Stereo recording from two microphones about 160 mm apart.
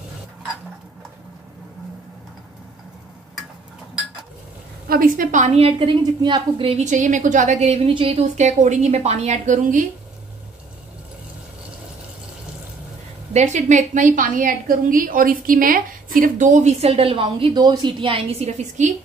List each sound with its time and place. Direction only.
4.8 s a woman's voice: 65° right (ahead or behind)
5.7 s a woman's voice: 35° right (ahead or behind); by 9.8 s 50° right (ahead or behind)
13.3 s a woman's voice: 45° right (ahead or behind)